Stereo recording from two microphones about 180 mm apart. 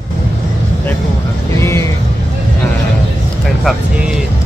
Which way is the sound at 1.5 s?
15° left (ahead or behind).